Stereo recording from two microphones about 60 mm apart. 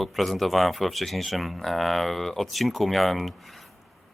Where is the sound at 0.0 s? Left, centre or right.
Centre.